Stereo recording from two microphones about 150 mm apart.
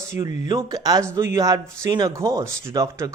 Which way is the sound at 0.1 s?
20° right (ahead or behind).